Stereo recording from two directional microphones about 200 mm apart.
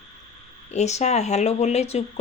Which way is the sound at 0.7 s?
35° left (ahead or behind).